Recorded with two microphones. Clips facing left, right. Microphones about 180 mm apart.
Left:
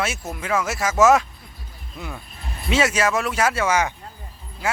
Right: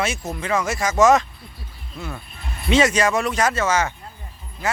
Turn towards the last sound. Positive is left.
turn(degrees=10)  # may be behind; listen again after turning